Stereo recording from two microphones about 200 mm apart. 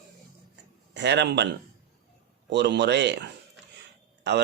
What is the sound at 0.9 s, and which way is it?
Speech, 60° right (ahead or behind).